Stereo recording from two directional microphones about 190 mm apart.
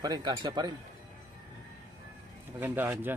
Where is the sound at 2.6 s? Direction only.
10° right (ahead or behind).